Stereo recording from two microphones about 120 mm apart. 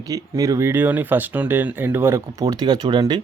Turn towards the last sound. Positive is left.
turn(degrees=-35)  # may be behind; listen again after turning